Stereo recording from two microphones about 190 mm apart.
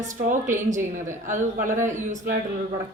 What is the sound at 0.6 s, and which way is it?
A woman's voice, 40° right (ahead or behind).